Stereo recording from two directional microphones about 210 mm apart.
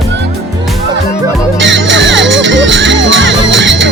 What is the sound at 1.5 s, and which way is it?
Music, 60° right (ahead or behind).